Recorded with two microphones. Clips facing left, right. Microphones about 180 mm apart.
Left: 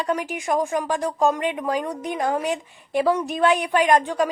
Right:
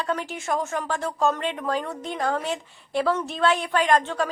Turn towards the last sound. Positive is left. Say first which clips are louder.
# left 3 dB
turn(degrees=15)  # may be behind; listen again after turning